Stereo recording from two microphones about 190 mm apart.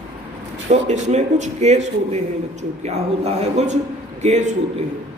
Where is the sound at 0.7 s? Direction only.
35° right (ahead or behind).